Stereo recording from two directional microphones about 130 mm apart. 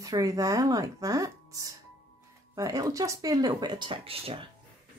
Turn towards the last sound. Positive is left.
turn(degrees=-45)  # may be behind; listen again after turning